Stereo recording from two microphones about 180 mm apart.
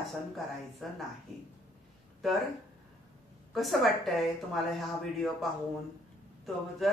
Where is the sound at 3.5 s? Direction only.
Centre (ahead or behind).